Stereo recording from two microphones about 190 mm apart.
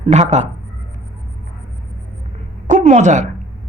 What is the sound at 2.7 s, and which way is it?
Speech, 40° right (ahead or behind).